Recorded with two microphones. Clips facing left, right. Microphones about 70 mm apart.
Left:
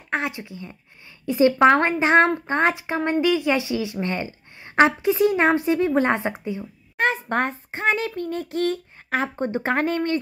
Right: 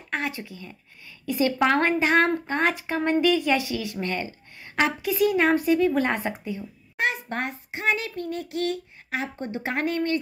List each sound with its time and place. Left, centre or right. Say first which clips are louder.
0.1 s a woman's voice: left 3 dB; left
7.0 s speech: left 5 dB; left